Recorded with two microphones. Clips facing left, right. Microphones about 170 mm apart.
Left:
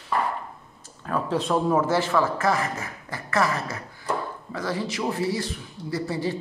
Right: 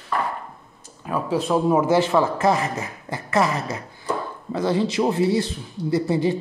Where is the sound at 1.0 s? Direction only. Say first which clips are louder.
Right 2 dB; 10° right (ahead or behind).